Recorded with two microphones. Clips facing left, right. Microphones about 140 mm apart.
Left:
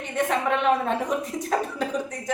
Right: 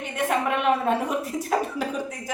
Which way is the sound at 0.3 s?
5° right (ahead or behind).